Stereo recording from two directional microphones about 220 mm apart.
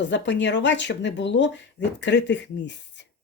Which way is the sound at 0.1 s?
55° left (ahead or behind).